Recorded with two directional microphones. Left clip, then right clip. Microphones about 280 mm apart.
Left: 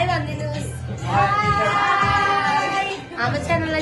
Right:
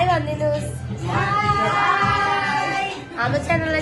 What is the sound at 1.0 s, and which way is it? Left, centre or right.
Speech, centre.